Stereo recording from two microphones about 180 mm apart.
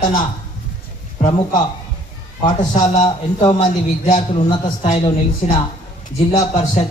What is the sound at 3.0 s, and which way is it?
A man's voice, 25° left (ahead or behind).